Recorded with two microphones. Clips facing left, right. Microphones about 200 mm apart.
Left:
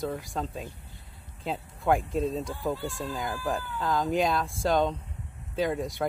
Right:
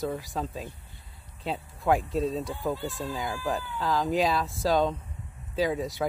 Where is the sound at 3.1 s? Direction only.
Centre (ahead or behind).